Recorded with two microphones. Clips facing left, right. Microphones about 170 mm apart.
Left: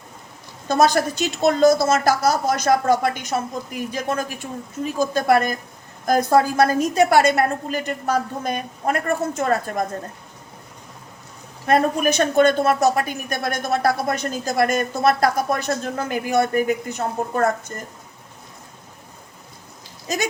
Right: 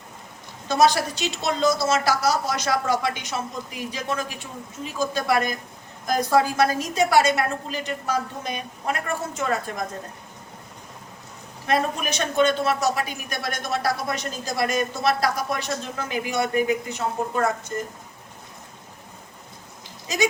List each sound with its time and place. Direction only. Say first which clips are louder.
0.7 s a woman's voice: left 2 dB; 50° left (ahead or behind)
11.6 s a woman's voice: left 6 dB; 50° left (ahead or behind)
20.1 s a woman's voice: left 1 dB; 50° left (ahead or behind)